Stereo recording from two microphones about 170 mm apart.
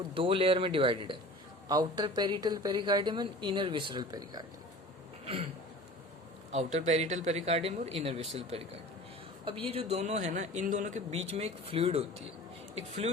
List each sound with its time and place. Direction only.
0.1 s speech: 30° right (ahead or behind)
6.5 s a man's voice: 40° right (ahead or behind)